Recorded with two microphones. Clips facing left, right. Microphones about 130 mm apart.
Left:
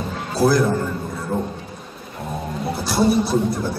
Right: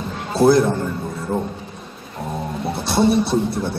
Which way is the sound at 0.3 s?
25° right (ahead or behind).